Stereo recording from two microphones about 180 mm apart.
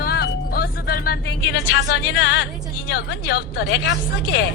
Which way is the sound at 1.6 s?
75° left (ahead or behind).